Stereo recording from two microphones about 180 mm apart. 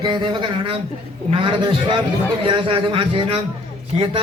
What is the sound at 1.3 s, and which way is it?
A man's voice, 30° right (ahead or behind).